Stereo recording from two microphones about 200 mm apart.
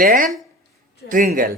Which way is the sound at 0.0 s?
40° right (ahead or behind).